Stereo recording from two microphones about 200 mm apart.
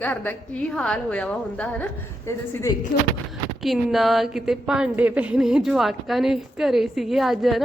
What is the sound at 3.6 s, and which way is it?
A woman's voice, centre (ahead or behind).